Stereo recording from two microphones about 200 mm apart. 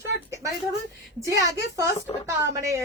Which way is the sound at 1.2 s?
15° right (ahead or behind).